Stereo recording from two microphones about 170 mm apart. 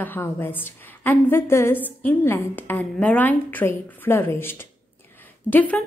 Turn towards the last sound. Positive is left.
turn(degrees=10)  # may be behind; listen again after turning